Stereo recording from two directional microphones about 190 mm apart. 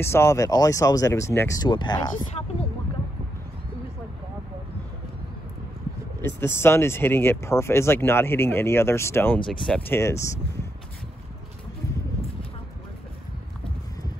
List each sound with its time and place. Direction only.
0.0 s speech: 15° left (ahead or behind)
6.2 s speech: 10° left (ahead or behind)